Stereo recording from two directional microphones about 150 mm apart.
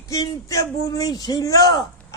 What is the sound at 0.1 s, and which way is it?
Speech, 20° left (ahead or behind).